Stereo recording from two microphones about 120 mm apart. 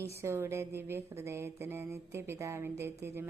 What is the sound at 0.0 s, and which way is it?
A woman's voice, 25° right (ahead or behind).